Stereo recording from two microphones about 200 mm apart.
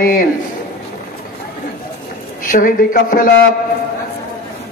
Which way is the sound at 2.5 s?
45° left (ahead or behind).